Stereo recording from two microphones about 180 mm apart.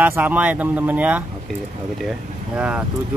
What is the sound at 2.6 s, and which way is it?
Speech, 5° right (ahead or behind).